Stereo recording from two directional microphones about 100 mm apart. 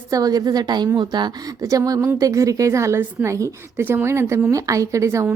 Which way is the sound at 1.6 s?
35° right (ahead or behind).